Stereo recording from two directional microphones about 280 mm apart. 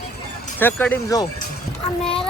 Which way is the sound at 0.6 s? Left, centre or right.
Centre.